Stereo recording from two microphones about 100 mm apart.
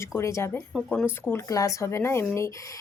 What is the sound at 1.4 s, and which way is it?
Speech, 35° left (ahead or behind).